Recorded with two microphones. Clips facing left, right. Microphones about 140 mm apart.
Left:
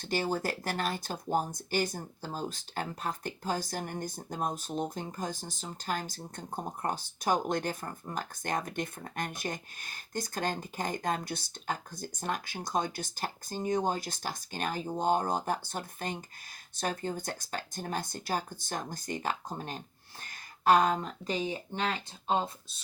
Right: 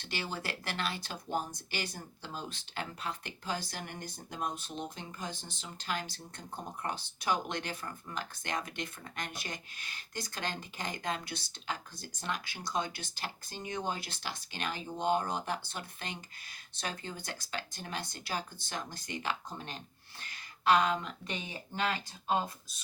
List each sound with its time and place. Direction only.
0.0 s speech: 45° left (ahead or behind); by 22.5 s 25° left (ahead or behind)